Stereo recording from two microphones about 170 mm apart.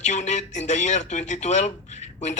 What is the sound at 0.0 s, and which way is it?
A man's voice, 45° left (ahead or behind).